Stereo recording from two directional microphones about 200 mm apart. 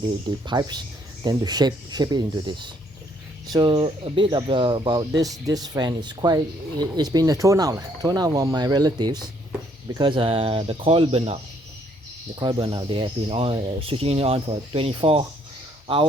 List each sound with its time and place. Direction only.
0.3 s speech: 20° right (ahead or behind)
12.4 s speech: 20° right (ahead or behind)